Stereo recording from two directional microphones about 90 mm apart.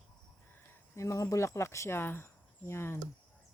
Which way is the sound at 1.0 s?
35° left (ahead or behind).